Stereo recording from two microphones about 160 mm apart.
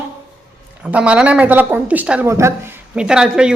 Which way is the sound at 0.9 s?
5° right (ahead or behind).